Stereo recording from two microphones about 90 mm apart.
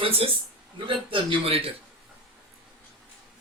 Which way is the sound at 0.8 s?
75° right (ahead or behind).